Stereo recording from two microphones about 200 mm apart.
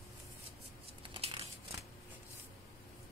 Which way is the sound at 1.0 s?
25° right (ahead or behind).